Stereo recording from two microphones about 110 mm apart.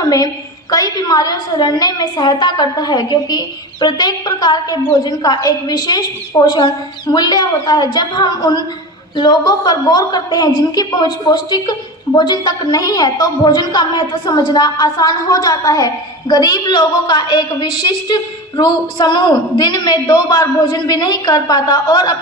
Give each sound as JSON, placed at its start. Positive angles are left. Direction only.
{"t": 0.0, "sound": "a woman's voice", "side_deg": 35}